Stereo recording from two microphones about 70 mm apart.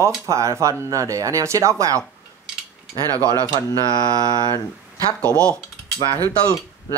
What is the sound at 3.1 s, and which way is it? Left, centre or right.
Mantra, right.